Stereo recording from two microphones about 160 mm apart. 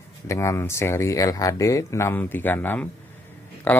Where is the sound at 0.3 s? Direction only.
20° left (ahead or behind).